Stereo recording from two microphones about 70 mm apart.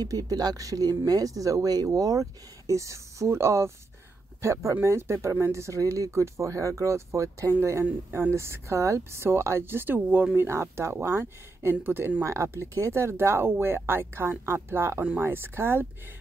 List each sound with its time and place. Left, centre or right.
0.0 s speech: right
8.1 s speech: right
15.0 s speech: right